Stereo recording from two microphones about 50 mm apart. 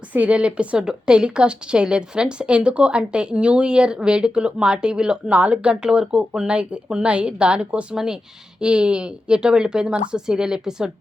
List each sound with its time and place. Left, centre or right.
0.1 s a woman's voice: right
0.8 s a woman's voice: centre
5.3 s a woman's voice: right
5.8 s a woman's voice: centre